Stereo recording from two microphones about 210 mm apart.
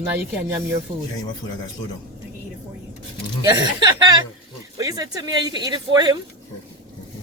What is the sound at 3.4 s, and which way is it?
A woman's voice, 20° right (ahead or behind).